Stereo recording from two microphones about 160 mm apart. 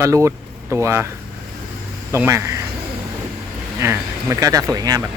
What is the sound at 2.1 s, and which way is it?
Speech, 15° right (ahead or behind).